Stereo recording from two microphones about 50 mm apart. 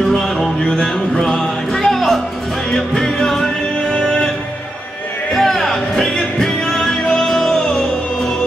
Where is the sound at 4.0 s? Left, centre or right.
Centre.